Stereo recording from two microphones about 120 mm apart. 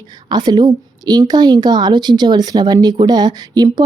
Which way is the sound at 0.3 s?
40° right (ahead or behind).